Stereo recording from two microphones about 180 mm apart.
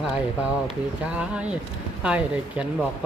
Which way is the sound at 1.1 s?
5° right (ahead or behind).